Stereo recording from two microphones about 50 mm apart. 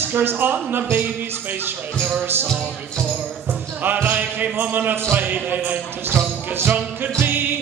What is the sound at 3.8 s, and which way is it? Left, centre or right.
Music, right.